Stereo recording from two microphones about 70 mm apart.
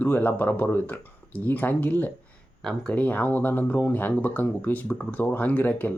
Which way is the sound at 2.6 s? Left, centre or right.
Centre.